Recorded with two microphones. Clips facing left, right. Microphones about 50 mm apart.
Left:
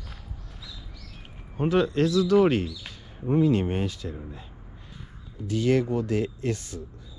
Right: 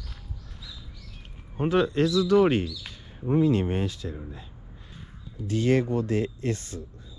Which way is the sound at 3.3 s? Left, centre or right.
Left.